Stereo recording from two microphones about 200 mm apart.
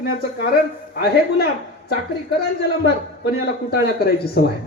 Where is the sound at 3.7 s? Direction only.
50° left (ahead or behind).